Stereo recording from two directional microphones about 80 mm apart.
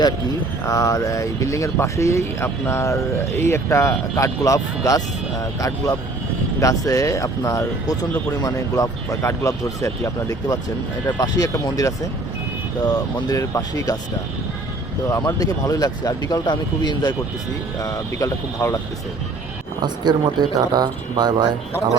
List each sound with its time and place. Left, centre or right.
0.7 s speech: left
12.8 s speech: left
13.4 s speech: left
15.4 s speech: left
17.7 s speech: left
19.8 s speech: right